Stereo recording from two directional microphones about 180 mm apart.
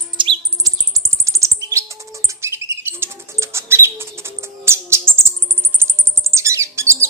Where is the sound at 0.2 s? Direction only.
25° right (ahead or behind).